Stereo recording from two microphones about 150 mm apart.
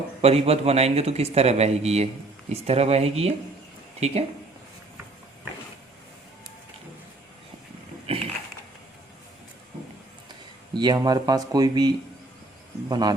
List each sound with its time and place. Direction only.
0.2 s a man's voice: 40° right (ahead or behind)
8.1 s a sound: 40° right (ahead or behind)
10.8 s speech: 30° right (ahead or behind)